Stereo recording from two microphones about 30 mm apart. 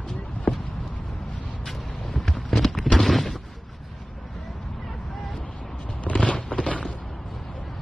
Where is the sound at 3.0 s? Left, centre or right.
Centre.